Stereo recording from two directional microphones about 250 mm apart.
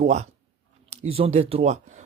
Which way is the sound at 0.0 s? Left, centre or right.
Right.